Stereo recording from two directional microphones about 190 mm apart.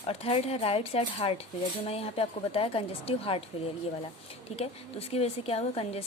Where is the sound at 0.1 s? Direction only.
30° left (ahead or behind).